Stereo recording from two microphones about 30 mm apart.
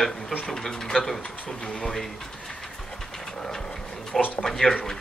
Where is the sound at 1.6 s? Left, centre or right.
Left.